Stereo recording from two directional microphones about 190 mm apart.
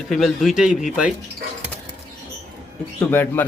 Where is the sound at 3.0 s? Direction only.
10° left (ahead or behind).